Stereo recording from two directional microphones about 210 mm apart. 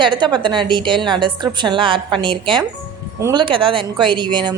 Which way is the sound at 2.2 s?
5° left (ahead or behind).